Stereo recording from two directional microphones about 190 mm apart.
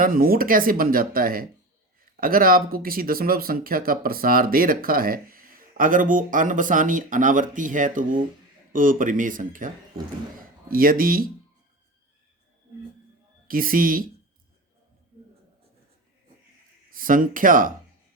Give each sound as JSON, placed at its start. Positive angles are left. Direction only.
{"t": 0.0, "sound": "speech", "side_deg": -50}
{"t": 13.5, "sound": "speech", "side_deg": -50}
{"t": 16.9, "sound": "speech", "side_deg": -45}